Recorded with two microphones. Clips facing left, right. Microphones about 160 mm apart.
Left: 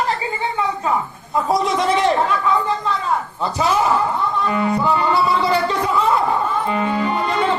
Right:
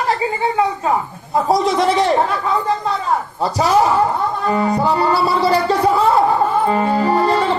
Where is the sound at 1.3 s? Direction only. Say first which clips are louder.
Right 3 dB; 35° right (ahead or behind).